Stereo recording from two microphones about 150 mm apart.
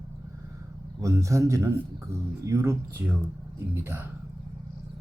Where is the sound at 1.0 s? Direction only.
20° right (ahead or behind).